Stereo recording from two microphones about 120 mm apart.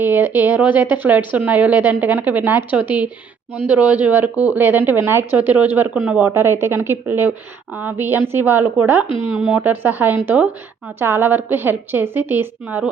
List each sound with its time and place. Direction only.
0.0 s a woman's voice: 15° right (ahead or behind)
9.0 s speech: 50° left (ahead or behind)
9.6 s a woman's voice: 15° right (ahead or behind)